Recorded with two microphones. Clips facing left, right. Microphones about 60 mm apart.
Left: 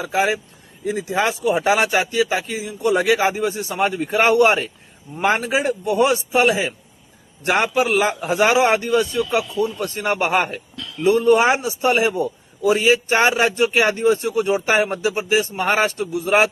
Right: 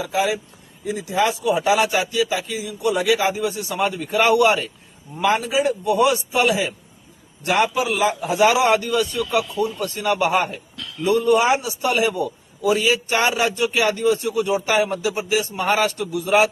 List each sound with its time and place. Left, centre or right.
0.0 s a man's voice: left